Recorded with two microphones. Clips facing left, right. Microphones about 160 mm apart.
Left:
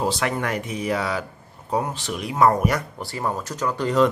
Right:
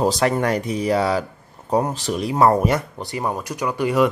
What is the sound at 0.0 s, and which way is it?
Speech, 40° right (ahead or behind).